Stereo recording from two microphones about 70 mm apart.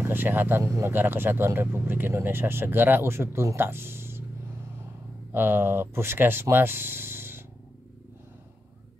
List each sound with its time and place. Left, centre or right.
0.0 s speech: right
5.3 s speech: right
6.5 s a sound: right